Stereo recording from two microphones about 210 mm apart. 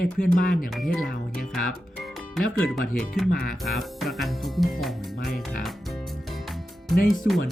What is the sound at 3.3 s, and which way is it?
Speech, 45° left (ahead or behind).